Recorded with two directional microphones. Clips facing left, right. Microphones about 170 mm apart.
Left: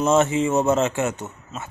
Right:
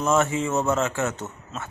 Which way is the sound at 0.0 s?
20° left (ahead or behind).